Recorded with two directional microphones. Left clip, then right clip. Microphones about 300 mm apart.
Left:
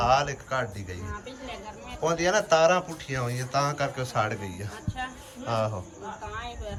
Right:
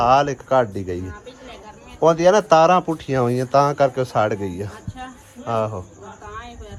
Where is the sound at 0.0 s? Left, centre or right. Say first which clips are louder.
Right 8 dB; centre.